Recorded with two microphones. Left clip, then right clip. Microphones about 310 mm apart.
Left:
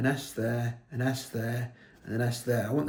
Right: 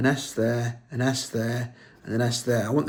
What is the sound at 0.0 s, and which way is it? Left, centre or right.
Speech, centre.